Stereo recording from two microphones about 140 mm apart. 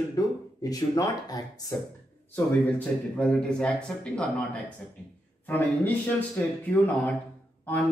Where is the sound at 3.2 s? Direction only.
5° left (ahead or behind).